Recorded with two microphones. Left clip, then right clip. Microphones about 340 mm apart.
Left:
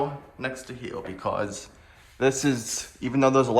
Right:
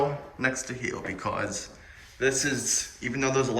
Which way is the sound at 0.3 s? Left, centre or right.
Centre.